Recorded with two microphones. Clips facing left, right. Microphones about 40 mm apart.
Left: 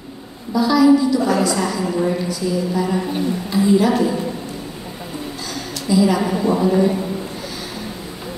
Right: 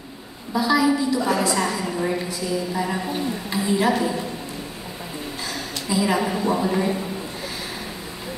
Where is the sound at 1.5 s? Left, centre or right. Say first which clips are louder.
Left 3 dB; centre.